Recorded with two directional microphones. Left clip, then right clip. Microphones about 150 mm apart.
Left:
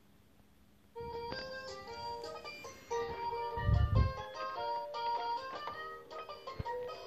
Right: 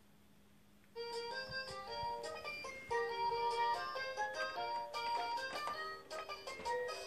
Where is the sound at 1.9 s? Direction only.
15° right (ahead or behind).